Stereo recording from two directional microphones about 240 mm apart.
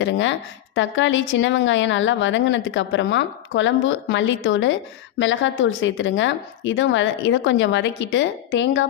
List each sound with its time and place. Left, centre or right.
0.0 s a woman's voice: left